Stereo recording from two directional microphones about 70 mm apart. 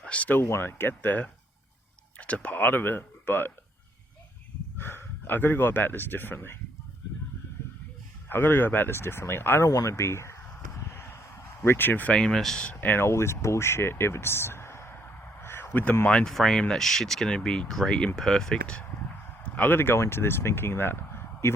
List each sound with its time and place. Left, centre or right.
0.0 s speech: centre
4.8 s speech: left
8.3 s speech: left
9.6 s speech: left
9.9 s a sound: left; by 12.6 s centre
12.6 s speech: left
16.0 s speech: centre
19.5 s speech: left